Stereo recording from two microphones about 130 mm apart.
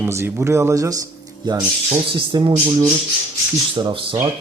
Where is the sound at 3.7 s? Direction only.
40° right (ahead or behind).